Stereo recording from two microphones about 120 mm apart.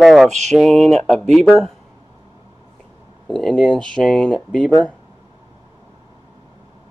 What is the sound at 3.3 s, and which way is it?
Speech, 5° left (ahead or behind).